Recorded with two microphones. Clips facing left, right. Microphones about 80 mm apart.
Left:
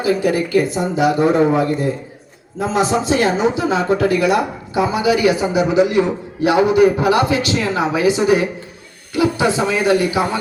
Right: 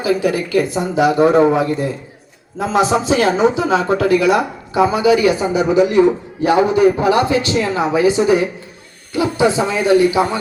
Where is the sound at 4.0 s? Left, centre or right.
Left.